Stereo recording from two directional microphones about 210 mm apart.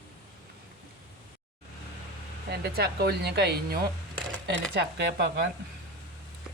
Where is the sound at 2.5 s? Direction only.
45° right (ahead or behind).